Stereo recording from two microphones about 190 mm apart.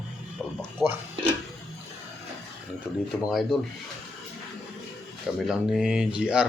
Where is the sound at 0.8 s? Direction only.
20° left (ahead or behind).